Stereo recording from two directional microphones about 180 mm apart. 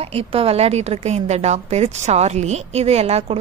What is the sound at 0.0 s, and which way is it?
Speech, 35° right (ahead or behind).